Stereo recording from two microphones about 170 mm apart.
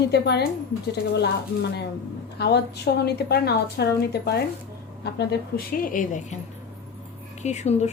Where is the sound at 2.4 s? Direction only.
75° left (ahead or behind); by 6.3 s 45° left (ahead or behind).